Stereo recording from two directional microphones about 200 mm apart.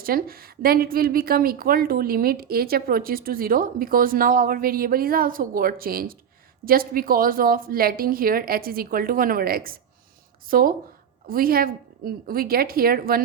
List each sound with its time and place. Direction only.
0.0 s a woman's voice: 45° right (ahead or behind)